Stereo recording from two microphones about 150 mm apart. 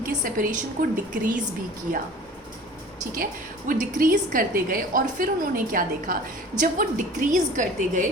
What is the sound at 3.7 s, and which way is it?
A woman's voice, 65° right (ahead or behind).